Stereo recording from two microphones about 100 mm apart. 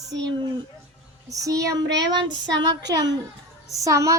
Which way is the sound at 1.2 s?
35° right (ahead or behind).